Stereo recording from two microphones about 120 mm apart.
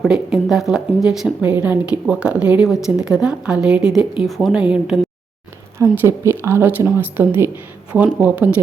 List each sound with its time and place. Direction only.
0.0 s speech: 5° right (ahead or behind)
1.4 s speech: 15° right (ahead or behind)
5.8 s speech: 20° right (ahead or behind)